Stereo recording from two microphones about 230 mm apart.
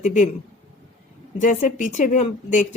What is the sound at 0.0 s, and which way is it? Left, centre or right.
Speech, left.